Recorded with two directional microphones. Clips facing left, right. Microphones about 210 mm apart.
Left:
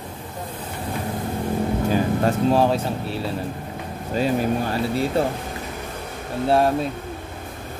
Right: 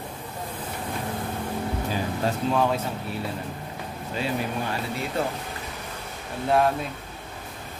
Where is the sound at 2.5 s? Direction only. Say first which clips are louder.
Left 4 dB; 30° left (ahead or behind).